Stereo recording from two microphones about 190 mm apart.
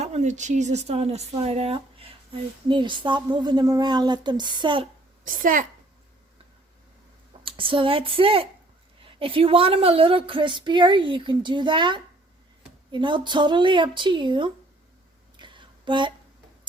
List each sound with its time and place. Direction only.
0.0 s a woman's voice: 35° right (ahead or behind)
5.2 s a woman's voice: 45° right (ahead or behind)
7.4 s a woman's voice: 25° right (ahead or behind)
15.4 s a sound: 25° right (ahead or behind)